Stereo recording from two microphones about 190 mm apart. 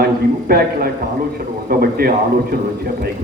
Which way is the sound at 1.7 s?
50° right (ahead or behind).